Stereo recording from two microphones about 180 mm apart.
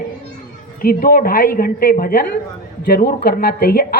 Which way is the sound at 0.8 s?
55° left (ahead or behind).